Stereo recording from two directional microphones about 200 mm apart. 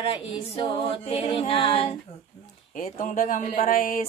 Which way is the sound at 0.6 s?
25° left (ahead or behind).